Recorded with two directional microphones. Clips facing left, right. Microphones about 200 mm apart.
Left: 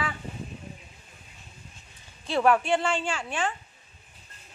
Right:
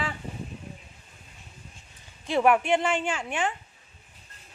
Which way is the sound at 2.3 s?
15° right (ahead or behind).